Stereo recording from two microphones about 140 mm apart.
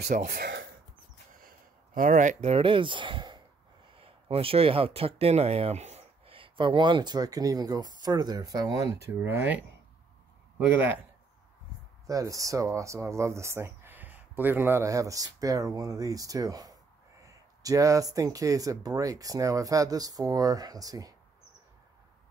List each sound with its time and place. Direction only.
0.1 s speech: 75° right (ahead or behind)
2.0 s speech: 65° right (ahead or behind)
2.5 s speech: 40° right (ahead or behind); by 9.7 s 15° right (ahead or behind)
12.1 s speech: 25° right (ahead or behind)